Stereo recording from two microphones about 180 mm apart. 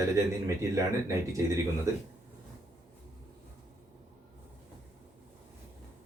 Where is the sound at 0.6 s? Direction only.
20° right (ahead or behind).